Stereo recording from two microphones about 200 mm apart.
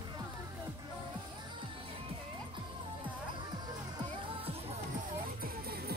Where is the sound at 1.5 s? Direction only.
25° right (ahead or behind).